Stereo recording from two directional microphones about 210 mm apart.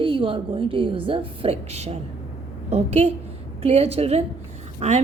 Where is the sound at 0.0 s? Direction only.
25° right (ahead or behind).